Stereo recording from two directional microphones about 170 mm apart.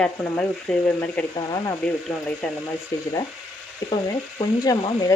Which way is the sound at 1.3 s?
20° left (ahead or behind).